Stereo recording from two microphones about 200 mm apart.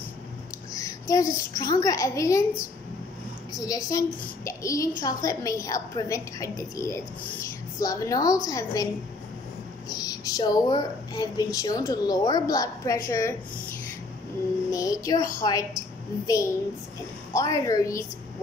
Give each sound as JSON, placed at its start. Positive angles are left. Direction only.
{"t": 0.7, "sound": "a child's voice", "side_deg": 15}
{"t": 3.5, "sound": "a woman's voice", "side_deg": 20}
{"t": 9.8, "sound": "speech", "side_deg": 20}
{"t": 14.7, "sound": "a woman's voice", "side_deg": 15}